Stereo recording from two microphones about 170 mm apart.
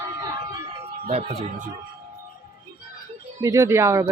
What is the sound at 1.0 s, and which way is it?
Speech, 40° right (ahead or behind).